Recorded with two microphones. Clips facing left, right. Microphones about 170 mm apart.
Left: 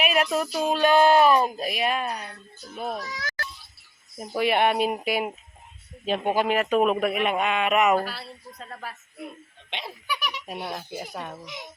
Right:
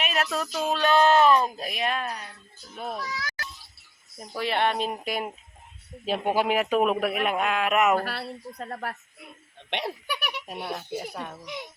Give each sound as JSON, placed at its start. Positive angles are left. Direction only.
{"t": 0.0, "sound": "speech", "side_deg": 15}
{"t": 2.9, "sound": "speech", "side_deg": 45}
{"t": 4.2, "sound": "speech", "side_deg": 15}
{"t": 6.1, "sound": "a man's voice", "side_deg": -5}
{"t": 8.0, "sound": "a woman's voice", "side_deg": -60}
{"t": 10.4, "sound": "a man's voice", "side_deg": 0}